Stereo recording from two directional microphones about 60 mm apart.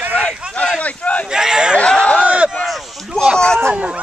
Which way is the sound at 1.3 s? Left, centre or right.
Centre.